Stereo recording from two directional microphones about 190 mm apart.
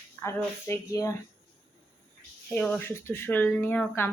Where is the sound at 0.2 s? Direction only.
15° left (ahead or behind).